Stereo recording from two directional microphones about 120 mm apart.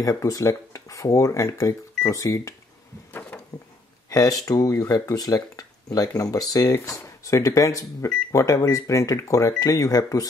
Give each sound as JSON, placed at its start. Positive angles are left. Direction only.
{"t": 0.0, "sound": "speech", "side_deg": 30}
{"t": 3.1, "sound": "a sound", "side_deg": 15}
{"t": 4.1, "sound": "speech", "side_deg": 30}